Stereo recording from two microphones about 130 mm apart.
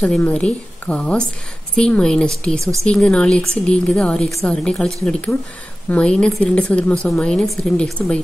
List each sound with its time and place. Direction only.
0.0 s a woman's voice: 5° left (ahead or behind)